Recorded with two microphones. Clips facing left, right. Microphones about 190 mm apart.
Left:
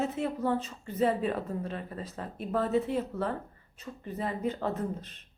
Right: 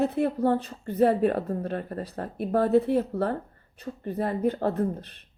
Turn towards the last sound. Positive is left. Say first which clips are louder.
# right 6 dB
turn(degrees=-60)  # may be behind; listen again after turning